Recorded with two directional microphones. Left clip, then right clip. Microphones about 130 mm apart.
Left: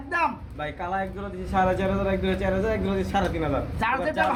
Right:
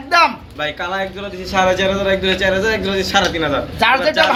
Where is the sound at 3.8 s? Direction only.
20° right (ahead or behind).